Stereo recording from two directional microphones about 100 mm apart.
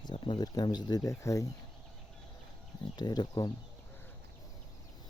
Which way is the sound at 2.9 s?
45° left (ahead or behind).